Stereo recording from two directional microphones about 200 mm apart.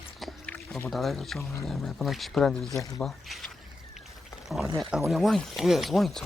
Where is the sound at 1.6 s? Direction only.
Centre (ahead or behind).